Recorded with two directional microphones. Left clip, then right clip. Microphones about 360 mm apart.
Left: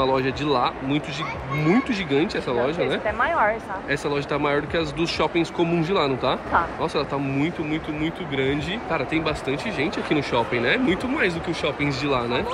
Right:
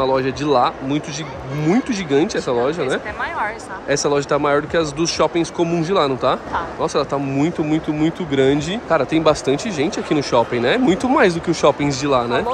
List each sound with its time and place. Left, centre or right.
0.0 s speech: centre
2.8 s speech: centre
3.9 s speech: centre
7.7 s speech: right
8.5 s speech: centre